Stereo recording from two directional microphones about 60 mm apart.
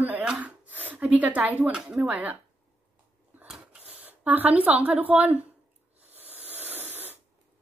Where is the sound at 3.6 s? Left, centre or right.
Right.